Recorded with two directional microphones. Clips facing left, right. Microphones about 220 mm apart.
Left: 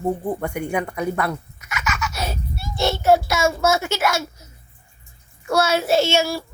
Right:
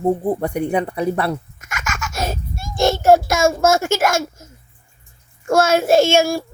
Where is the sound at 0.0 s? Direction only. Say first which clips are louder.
Right 5 dB; 35° right (ahead or behind).